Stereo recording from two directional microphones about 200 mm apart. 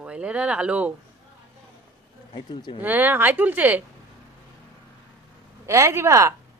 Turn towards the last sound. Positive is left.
turn(degrees=-15)  # may be behind; listen again after turning